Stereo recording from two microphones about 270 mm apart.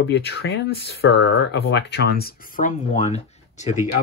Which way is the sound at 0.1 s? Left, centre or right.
Left.